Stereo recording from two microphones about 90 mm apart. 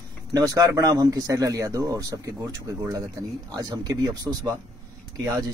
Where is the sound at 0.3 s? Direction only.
40° right (ahead or behind).